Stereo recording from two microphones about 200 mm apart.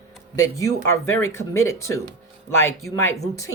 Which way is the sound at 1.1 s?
15° left (ahead or behind).